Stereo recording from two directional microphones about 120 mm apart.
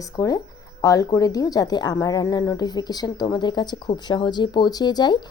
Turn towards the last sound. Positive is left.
turn(degrees=40)  # may be behind; listen again after turning